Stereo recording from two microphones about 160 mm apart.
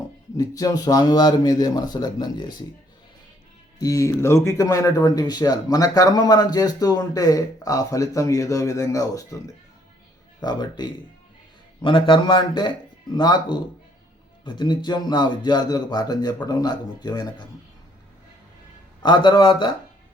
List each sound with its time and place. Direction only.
0.3 s speech: 25° left (ahead or behind)
3.8 s speech: 20° left (ahead or behind)
10.4 s speech: 25° left (ahead or behind)
19.0 s a man's voice: 30° left (ahead or behind)